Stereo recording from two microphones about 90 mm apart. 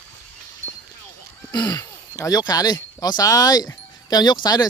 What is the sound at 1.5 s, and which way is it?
Speech, 50° left (ahead or behind).